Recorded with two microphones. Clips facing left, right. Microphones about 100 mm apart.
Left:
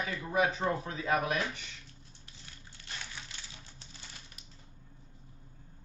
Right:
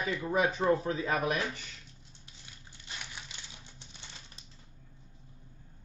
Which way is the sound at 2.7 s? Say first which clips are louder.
Even; 15° right (ahead or behind).